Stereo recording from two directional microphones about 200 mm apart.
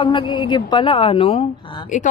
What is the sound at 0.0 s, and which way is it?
A woman's voice, 25° left (ahead or behind).